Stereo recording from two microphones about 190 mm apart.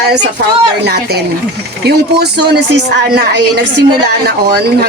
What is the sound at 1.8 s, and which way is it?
A woman's voice, 60° right (ahead or behind).